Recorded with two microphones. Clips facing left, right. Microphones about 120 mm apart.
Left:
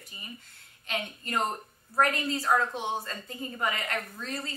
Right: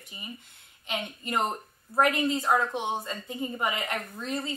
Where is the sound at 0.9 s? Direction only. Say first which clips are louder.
Right 1 dB; 15° right (ahead or behind).